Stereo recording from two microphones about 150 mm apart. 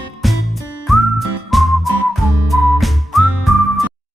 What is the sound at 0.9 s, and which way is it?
Whistling, centre (ahead or behind).